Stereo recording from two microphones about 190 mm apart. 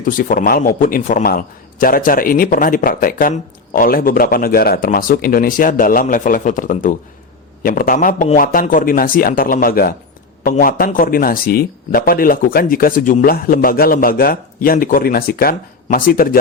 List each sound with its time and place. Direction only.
0.0 s a man's voice: 45° left (ahead or behind)